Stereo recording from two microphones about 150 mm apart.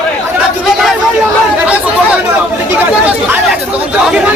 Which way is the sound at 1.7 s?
10° right (ahead or behind).